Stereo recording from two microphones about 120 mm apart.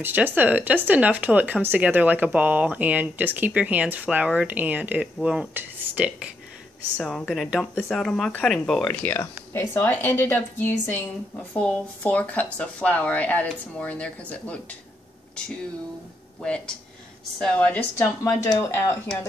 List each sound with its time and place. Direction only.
0.0 s speech: 15° right (ahead or behind)
7.0 s a woman's voice: 5° left (ahead or behind)
9.2 s speech: 20° left (ahead or behind)
11.5 s speech: 5° left (ahead or behind)
16.4 s speech: 10° left (ahead or behind)
17.9 s speech: 20° left (ahead or behind)